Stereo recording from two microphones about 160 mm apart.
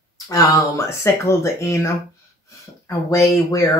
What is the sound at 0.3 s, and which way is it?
Speech, 20° left (ahead or behind).